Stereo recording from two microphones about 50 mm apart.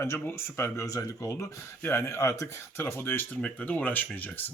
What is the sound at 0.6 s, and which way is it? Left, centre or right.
Speech, left.